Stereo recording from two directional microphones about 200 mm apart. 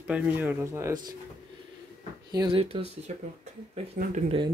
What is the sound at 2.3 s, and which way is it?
Speech, 25° right (ahead or behind).